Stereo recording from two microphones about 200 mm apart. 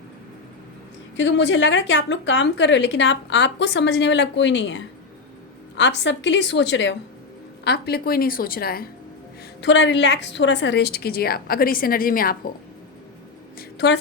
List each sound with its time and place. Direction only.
1.1 s a woman's voice: 65° left (ahead or behind); by 8.9 s 50° left (ahead or behind)
9.6 s a woman's voice: 65° left (ahead or behind); by 12.4 s 45° left (ahead or behind)
13.6 s a woman's voice: 60° left (ahead or behind)